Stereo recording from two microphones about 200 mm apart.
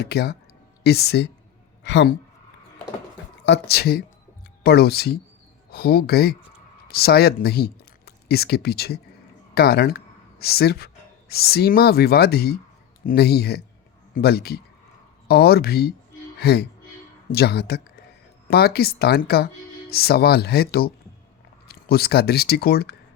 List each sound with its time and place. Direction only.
0.0 s a woman's voice: 55° left (ahead or behind)
3.4 s speech: 55° left (ahead or behind)